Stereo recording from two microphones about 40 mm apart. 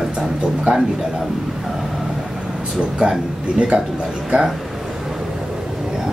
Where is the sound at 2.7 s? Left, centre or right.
Right.